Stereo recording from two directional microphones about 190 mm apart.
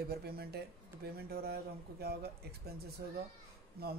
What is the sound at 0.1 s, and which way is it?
Speech, 55° right (ahead or behind).